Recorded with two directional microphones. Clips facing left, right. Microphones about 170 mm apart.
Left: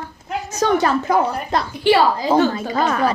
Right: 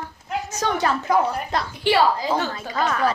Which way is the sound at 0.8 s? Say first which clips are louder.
Left 3 dB; 35° left (ahead or behind).